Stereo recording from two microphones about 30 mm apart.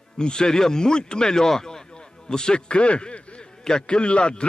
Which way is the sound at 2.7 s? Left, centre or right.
Left.